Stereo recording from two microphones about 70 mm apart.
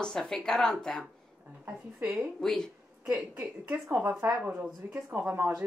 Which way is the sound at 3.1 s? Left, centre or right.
Right.